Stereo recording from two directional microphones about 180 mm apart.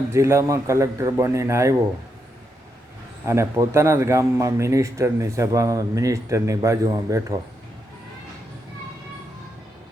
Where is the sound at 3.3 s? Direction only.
15° right (ahead or behind).